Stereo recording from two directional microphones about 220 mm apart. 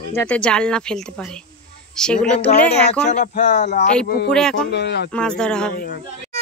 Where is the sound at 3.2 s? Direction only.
35° left (ahead or behind).